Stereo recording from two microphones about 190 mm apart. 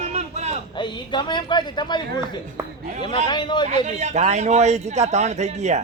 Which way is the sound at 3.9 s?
40° right (ahead or behind).